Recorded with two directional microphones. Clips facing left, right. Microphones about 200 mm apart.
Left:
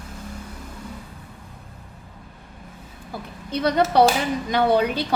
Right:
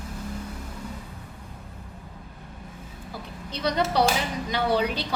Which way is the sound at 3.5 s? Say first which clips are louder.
Left 6 dB; 55° left (ahead or behind).